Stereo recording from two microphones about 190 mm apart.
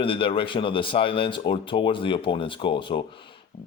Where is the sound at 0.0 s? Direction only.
25° left (ahead or behind).